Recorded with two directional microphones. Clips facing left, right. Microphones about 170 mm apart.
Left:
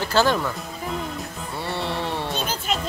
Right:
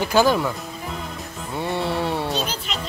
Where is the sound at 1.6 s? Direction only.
15° right (ahead or behind).